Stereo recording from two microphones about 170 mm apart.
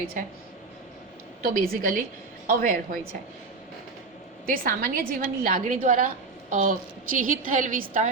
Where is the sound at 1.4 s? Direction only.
60° right (ahead or behind).